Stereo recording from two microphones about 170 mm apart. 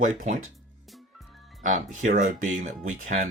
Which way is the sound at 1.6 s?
45° right (ahead or behind).